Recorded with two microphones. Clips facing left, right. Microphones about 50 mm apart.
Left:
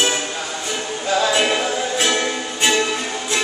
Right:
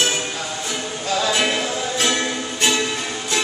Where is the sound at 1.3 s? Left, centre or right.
Centre.